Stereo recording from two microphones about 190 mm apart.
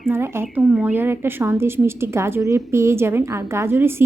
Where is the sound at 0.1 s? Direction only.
10° right (ahead or behind).